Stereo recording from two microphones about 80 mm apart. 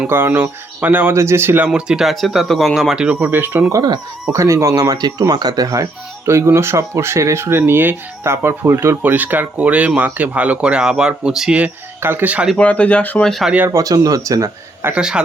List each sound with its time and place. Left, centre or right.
0.1 s speech: right
1.1 s speech: right
1.6 s speech: centre
3.2 s speech: right
3.7 s speech: right
4.3 s speech: right
9.0 s speech: right
12.0 s speech: right
12.5 s speech: centre
13.4 s speech: centre
13.7 s speech: right
14.9 s speech: centre